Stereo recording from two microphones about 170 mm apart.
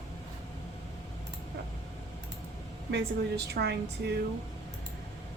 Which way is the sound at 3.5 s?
75° right (ahead or behind).